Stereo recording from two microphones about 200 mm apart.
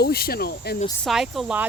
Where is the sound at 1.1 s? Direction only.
Centre (ahead or behind).